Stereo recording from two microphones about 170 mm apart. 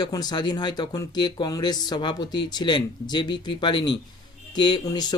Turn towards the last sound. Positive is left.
turn(degrees=25)  # may be behind; listen again after turning